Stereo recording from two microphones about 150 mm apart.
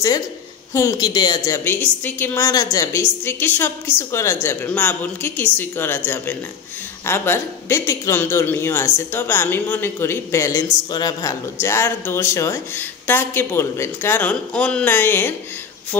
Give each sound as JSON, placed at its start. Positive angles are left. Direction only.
{"t": 0.7, "sound": "a woman's voice", "side_deg": 25}
{"t": 11.6, "sound": "a woman's voice", "side_deg": 15}